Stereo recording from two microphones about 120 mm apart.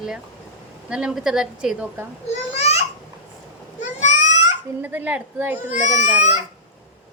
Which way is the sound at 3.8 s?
85° left.